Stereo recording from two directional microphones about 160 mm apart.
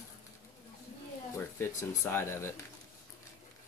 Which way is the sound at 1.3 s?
15° left (ahead or behind).